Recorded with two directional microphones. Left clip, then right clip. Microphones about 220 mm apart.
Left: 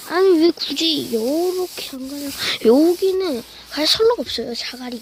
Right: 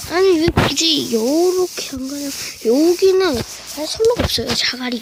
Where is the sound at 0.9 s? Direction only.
20° right (ahead or behind).